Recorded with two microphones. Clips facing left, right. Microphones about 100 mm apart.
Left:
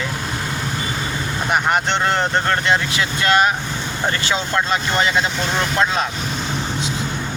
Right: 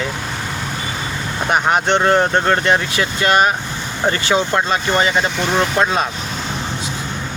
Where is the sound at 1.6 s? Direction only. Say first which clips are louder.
Right 6 dB; 15° right (ahead or behind).